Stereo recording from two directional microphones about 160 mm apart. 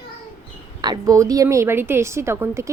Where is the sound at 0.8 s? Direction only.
25° right (ahead or behind).